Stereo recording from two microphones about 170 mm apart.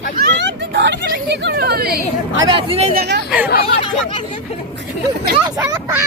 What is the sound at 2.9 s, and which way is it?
Speech, 75° right (ahead or behind).